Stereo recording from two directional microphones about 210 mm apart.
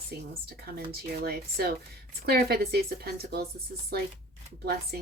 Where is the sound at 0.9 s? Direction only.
50° right (ahead or behind).